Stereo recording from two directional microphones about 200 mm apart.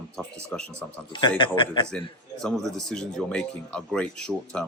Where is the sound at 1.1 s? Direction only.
25° left (ahead or behind).